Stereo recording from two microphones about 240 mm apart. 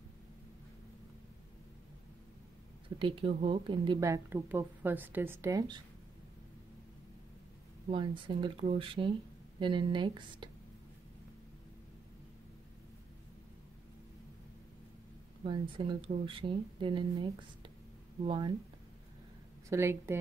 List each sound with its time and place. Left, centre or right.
3.0 s speech: right
7.9 s speech: right
15.4 s speech: centre
19.7 s speech: centre